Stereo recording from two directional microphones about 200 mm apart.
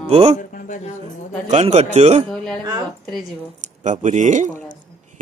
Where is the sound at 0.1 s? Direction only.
30° right (ahead or behind).